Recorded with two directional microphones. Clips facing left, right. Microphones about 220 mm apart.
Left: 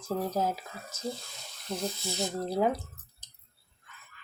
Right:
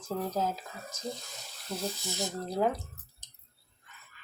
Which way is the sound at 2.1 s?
15° left (ahead or behind).